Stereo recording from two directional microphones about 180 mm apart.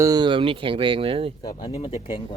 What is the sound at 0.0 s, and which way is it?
Speech, 20° right (ahead or behind).